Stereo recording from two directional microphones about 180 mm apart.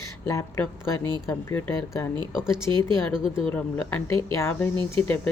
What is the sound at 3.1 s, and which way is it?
Speech, centre (ahead or behind).